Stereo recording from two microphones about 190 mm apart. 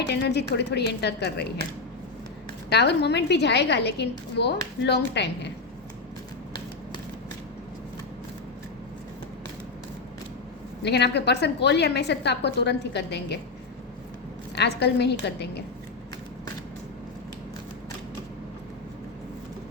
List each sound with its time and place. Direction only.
0.1 s a woman's voice: 60° left (ahead or behind)
2.6 s a woman's voice: 60° left (ahead or behind)
10.8 s a woman's voice: 60° left (ahead or behind)
14.5 s a woman's voice: 60° left (ahead or behind)